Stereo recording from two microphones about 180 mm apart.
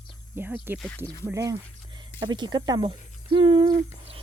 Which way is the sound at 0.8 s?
5° left (ahead or behind).